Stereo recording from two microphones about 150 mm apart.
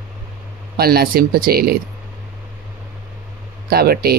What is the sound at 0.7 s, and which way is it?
Speech, 90° right.